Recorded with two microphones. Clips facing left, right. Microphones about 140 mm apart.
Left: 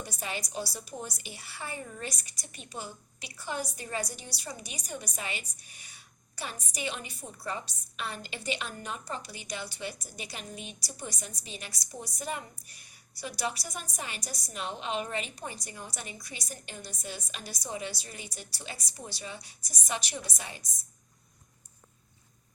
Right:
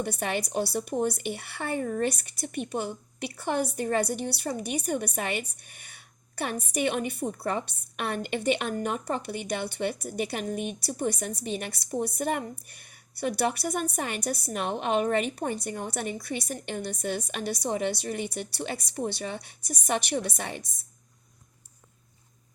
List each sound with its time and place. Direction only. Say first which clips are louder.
0.0 s a woman's voice: right 8 dB; 60° right (ahead or behind)